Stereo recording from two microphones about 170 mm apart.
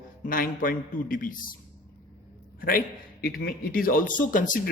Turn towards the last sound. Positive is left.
turn(degrees=50)  # may be behind; listen again after turning